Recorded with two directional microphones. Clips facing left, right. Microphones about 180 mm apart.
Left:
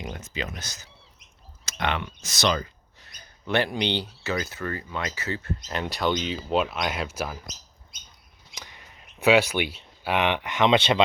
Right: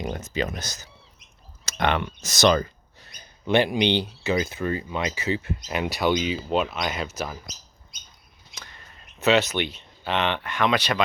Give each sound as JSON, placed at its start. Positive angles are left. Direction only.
{"t": 0.0, "sound": "speech", "side_deg": -40}
{"t": 3.2, "sound": "speech", "side_deg": -20}
{"t": 8.5, "sound": "speech", "side_deg": 15}